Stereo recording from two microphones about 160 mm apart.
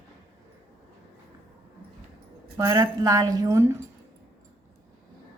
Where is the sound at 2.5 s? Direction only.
20° right (ahead or behind).